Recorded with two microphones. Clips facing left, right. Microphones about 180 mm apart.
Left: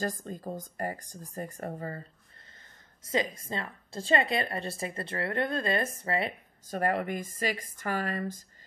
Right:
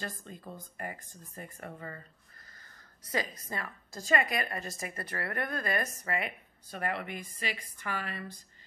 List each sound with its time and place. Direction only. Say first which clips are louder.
0.2 s speech: left 8 dB; 40° left (ahead or behind)
3.0 s a woman's voice: left 5 dB; 25° left (ahead or behind); by 8.4 s 45° left (ahead or behind)